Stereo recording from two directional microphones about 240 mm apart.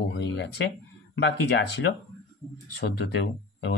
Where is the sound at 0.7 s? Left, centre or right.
Left.